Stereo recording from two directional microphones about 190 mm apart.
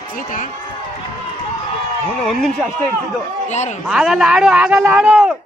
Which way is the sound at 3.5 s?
35° left (ahead or behind).